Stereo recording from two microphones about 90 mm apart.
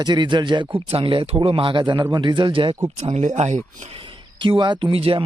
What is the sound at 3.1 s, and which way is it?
Speech, 90° right.